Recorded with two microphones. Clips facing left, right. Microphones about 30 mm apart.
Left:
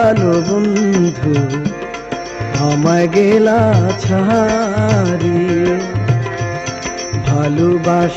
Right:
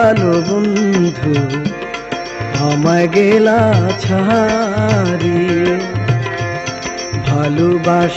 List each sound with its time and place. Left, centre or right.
0.0 s music: right
0.3 s music: right
0.9 s music: right
2.6 s music: right
3.1 s music: right
5.1 s music: right
7.3 s music: right